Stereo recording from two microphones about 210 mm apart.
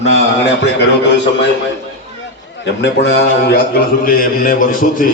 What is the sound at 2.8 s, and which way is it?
A man's voice, 55° left (ahead or behind).